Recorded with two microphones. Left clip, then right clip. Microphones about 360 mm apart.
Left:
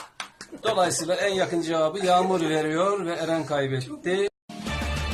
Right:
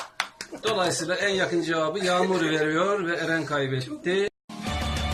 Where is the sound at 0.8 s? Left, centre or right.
Centre.